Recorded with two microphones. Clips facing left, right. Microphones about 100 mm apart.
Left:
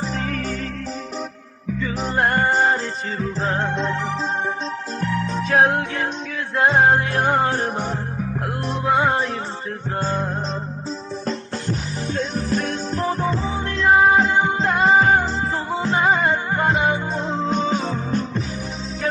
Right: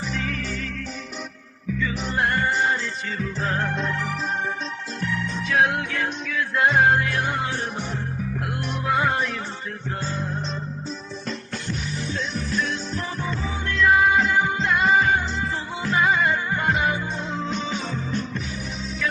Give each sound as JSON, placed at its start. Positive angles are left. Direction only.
{"t": 0.0, "sound": "music", "side_deg": 40}
{"t": 1.8, "sound": "music", "side_deg": 40}
{"t": 8.6, "sound": "music", "side_deg": 30}
{"t": 10.0, "sound": "music", "side_deg": 50}
{"t": 11.3, "sound": "music", "side_deg": 40}